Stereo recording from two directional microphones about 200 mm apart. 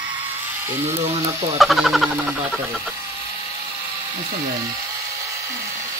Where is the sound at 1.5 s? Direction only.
Centre (ahead or behind).